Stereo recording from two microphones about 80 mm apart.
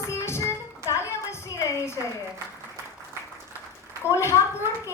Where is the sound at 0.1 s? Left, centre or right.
Left.